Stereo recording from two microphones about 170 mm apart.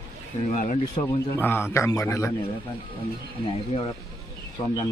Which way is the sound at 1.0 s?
45° left (ahead or behind).